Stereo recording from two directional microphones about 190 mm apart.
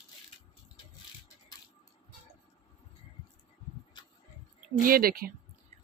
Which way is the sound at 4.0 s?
25° left (ahead or behind).